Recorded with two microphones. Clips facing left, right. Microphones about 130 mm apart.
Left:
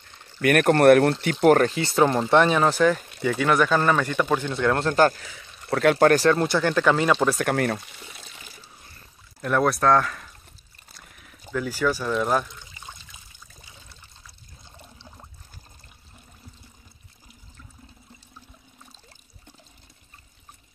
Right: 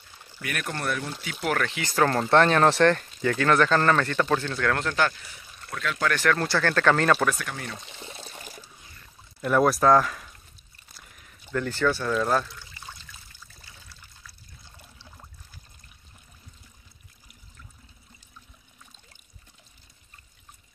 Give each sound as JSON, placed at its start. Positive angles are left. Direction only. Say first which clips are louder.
{"t": 0.4, "sound": "speech", "louder": "left 15 dB", "side_deg": 60}
{"t": 1.2, "sound": "speech", "louder": "left 10 dB", "side_deg": 45}
{"t": 2.1, "sound": "speech", "louder": "left 1 dB", "side_deg": 10}
{"t": 5.7, "sound": "speech", "louder": "left 12 dB", "side_deg": 60}
{"t": 6.0, "sound": "speech", "louder": "left 5 dB", "side_deg": 35}
{"t": 6.3, "sound": "speech", "louder": "left 3 dB", "side_deg": 20}
{"t": 7.4, "sound": "speech", "louder": "left 13 dB", "side_deg": 60}
{"t": 8.1, "sound": "water", "louder": "right 4 dB", "side_deg": -30}
{"t": 8.4, "sound": "water", "louder": "right 4 dB", "side_deg": -45}
{"t": 8.8, "sound": "pour", "louder": "left 1 dB", "side_deg": 35}
{"t": 9.4, "sound": "speech", "louder": "right 1 dB", "side_deg": 0}
{"t": 11.0, "sound": "a sound", "louder": "left 2 dB", "side_deg": 0}
{"t": 11.5, "sound": "water", "louder": "left 1 dB", "side_deg": 5}